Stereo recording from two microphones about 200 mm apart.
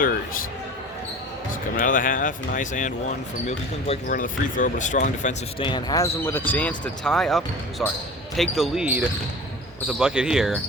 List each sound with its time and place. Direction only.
1.7 s speech: 40° left (ahead or behind)
5.5 s speech: 25° left (ahead or behind); by 10.6 s centre (ahead or behind)